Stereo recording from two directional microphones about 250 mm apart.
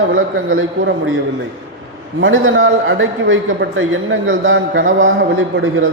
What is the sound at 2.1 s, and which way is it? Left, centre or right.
A man's voice, right.